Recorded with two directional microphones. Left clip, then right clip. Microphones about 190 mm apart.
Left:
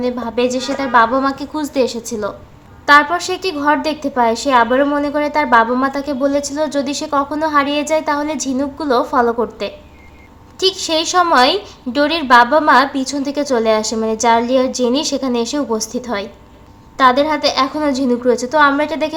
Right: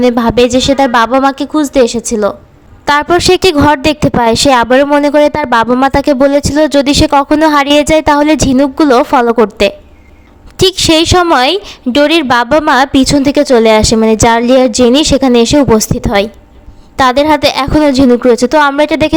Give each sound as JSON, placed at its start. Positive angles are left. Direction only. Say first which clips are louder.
{"t": 0.0, "sound": "a woman's voice", "louder": "right 10 dB", "side_deg": -45}